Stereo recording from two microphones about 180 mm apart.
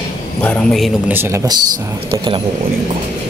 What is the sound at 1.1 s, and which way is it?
Speech, 15° right (ahead or behind).